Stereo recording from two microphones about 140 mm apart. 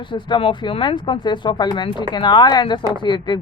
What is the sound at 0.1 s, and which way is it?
Speech, 35° left (ahead or behind).